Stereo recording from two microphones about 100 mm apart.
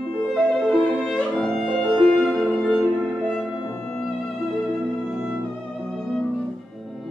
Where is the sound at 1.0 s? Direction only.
10° left (ahead or behind).